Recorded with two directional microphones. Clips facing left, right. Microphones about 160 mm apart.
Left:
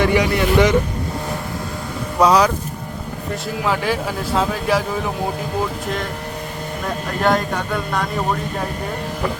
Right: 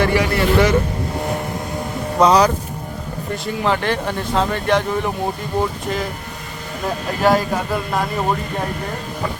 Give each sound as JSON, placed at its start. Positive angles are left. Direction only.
{"t": 0.0, "sound": "speech", "side_deg": 15}
{"t": 2.2, "sound": "speech", "side_deg": 0}
{"t": 6.8, "sound": "speech", "side_deg": -5}